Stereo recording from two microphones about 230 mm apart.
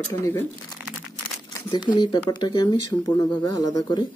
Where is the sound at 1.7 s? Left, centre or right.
Centre.